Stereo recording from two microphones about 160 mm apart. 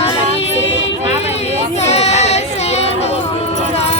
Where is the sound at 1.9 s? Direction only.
45° left (ahead or behind).